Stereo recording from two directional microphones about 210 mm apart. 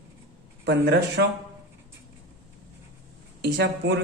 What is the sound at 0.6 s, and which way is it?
Speech, 55° right (ahead or behind).